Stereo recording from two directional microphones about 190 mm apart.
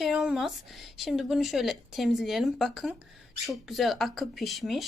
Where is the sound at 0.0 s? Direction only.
Centre (ahead or behind).